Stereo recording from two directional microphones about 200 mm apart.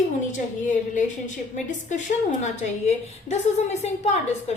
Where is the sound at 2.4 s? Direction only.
35° left (ahead or behind).